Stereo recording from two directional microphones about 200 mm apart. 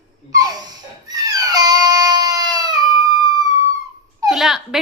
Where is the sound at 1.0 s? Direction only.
20° right (ahead or behind).